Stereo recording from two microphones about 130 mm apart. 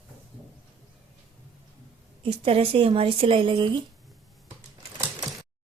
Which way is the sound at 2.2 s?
45° right (ahead or behind).